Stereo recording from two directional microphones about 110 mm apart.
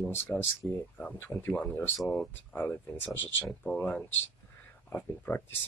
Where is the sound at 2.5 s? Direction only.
15° left (ahead or behind).